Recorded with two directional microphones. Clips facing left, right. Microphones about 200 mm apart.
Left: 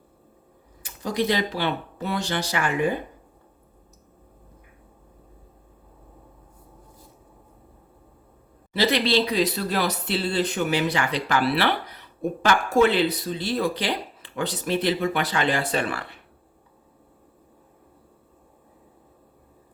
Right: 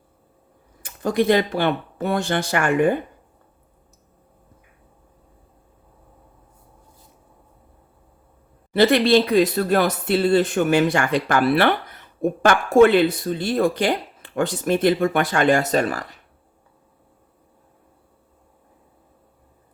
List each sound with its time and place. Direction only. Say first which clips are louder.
0.8 s speech: right 5 dB; 55° right (ahead or behind)
8.7 s speech: right 6 dB; 55° right (ahead or behind)